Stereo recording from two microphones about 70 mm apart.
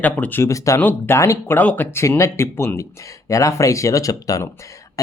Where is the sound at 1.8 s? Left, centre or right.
Left.